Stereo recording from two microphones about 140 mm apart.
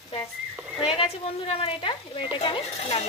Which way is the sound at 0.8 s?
40° left (ahead or behind).